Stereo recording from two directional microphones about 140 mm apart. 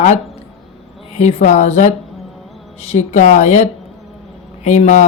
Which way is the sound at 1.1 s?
55° left (ahead or behind).